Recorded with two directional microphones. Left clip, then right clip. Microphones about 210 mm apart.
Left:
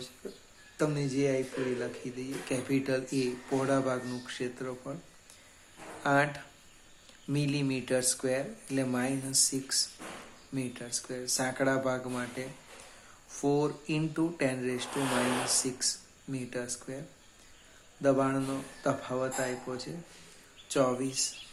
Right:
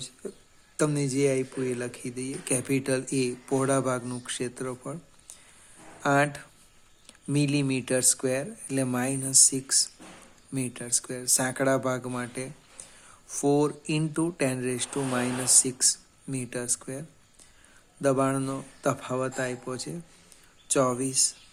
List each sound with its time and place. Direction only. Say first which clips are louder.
0.2 s a sound: right 5 dB; 50° right (ahead or behind)
0.8 s speech: right 4 dB; 50° right (ahead or behind)
18.0 s speech: right 3 dB; 50° right (ahead or behind)